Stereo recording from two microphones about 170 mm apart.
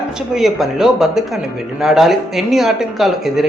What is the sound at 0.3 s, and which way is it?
Speech, centre (ahead or behind).